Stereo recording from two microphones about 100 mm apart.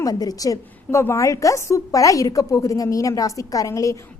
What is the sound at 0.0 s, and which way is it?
A woman's voice, 40° left (ahead or behind).